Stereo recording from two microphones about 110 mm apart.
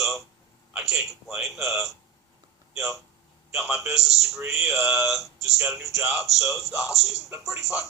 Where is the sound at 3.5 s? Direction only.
Centre (ahead or behind).